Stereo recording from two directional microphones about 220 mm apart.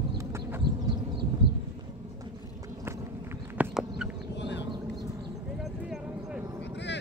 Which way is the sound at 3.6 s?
Centre (ahead or behind).